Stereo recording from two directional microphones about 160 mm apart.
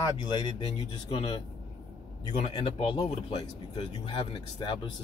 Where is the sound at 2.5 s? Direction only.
30° left (ahead or behind).